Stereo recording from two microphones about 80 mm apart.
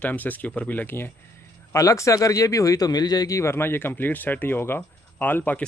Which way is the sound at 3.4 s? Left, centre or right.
Left.